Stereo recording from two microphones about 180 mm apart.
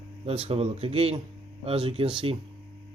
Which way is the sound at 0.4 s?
35° right (ahead or behind).